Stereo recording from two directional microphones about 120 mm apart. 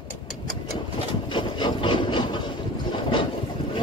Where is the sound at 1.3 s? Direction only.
40° left (ahead or behind).